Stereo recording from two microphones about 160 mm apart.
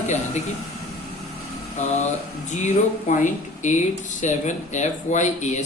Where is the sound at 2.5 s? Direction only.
50° left (ahead or behind).